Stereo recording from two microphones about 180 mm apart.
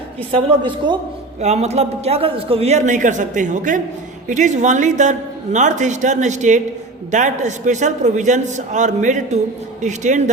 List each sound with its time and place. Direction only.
0.3 s a woman's voice: 25° right (ahead or behind)
1.4 s a man's voice: 35° right (ahead or behind)